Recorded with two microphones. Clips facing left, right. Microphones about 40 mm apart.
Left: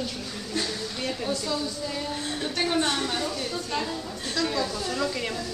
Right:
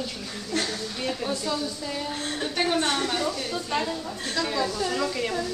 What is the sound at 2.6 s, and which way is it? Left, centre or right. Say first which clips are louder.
Speech: right 2 dB; right.